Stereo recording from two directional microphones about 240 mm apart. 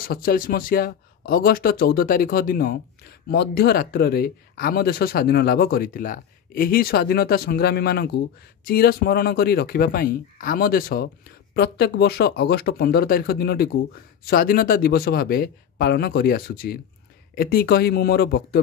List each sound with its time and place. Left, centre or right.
0.1 s speech: left